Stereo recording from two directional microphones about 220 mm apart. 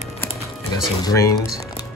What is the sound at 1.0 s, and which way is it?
Speech, 15° left (ahead or behind).